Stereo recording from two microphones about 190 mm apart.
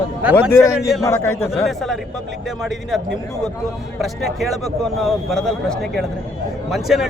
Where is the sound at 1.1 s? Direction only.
10° left (ahead or behind).